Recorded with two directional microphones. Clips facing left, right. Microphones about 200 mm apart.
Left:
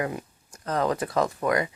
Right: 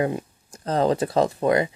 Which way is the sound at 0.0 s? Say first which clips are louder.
Right 6 dB; 25° right (ahead or behind).